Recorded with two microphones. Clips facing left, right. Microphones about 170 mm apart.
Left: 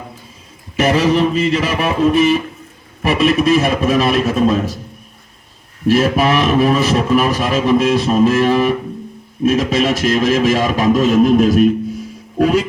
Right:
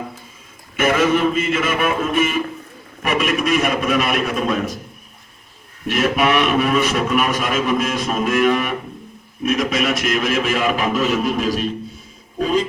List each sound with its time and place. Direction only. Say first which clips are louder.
0.8 s a man's voice: left 3 dB; 35° left (ahead or behind)
5.9 s a man's voice: left 4 dB; 35° left (ahead or behind)
12.4 s music: left 5 dB; 75° left (ahead or behind)